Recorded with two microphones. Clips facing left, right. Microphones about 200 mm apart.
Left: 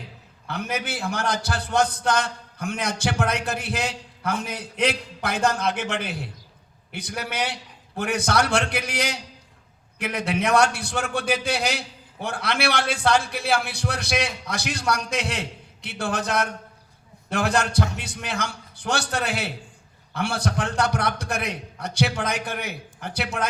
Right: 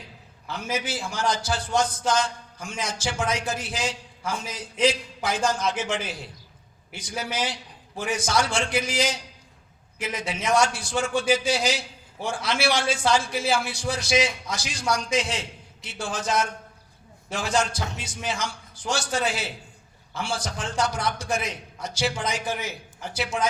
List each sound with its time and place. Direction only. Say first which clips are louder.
0.4 s a man's voice: left 1 dB; 60° left (ahead or behind)